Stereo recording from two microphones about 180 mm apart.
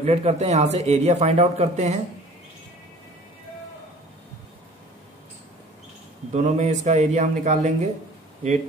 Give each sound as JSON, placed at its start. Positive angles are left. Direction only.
{"t": 0.0, "sound": "a man's voice", "side_deg": -35}
{"t": 6.3, "sound": "a man's voice", "side_deg": -40}